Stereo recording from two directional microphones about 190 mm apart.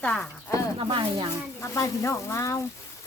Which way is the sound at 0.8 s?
25° right (ahead or behind).